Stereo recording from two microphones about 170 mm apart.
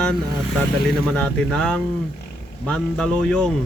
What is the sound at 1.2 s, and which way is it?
Speech, 5° left (ahead or behind).